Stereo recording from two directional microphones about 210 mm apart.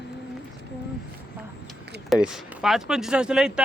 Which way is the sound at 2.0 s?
5° right (ahead or behind).